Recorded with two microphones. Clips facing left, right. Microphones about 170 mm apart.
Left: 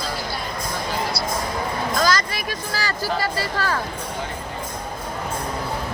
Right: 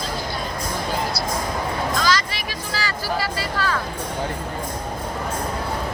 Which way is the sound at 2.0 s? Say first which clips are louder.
Left 1 dB; 45° left (ahead or behind).